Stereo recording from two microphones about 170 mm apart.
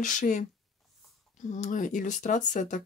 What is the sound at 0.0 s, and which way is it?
Speech, 50° left (ahead or behind).